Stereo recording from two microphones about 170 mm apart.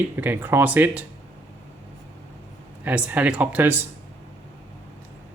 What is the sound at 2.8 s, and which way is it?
Speech, 10° right (ahead or behind).